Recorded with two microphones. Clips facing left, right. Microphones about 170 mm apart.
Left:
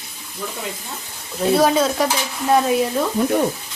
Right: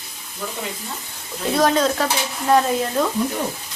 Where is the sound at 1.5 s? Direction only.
5° left (ahead or behind).